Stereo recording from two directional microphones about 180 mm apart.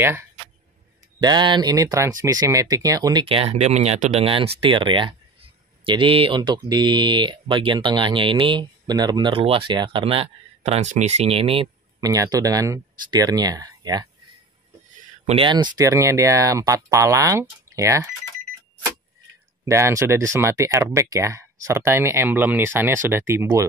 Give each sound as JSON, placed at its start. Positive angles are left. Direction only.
{"t": 0.0, "sound": "speech", "side_deg": -15}
{"t": 1.2, "sound": "speech", "side_deg": -25}
{"t": 15.2, "sound": "speech", "side_deg": -30}
{"t": 19.6, "sound": "speech", "side_deg": -15}